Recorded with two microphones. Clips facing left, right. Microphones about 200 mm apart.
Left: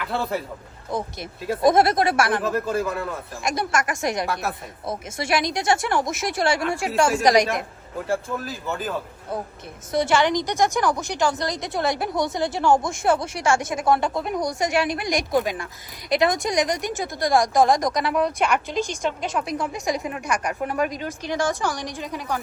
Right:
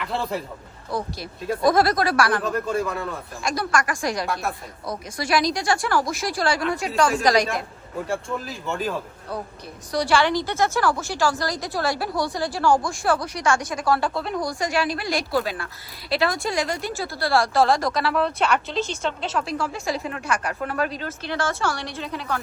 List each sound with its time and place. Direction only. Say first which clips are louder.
0.0 s a man's voice: left 1 dB; centre (ahead or behind)
0.9 s a woman's voice: even; 20° left (ahead or behind)
2.4 s speech: left 1 dB; centre (ahead or behind)
3.4 s a woman's voice: even; 25° left (ahead or behind)
7.9 s speech: left 1 dB; centre (ahead or behind)
9.9 s a woman's voice: left 1 dB; 20° left (ahead or behind)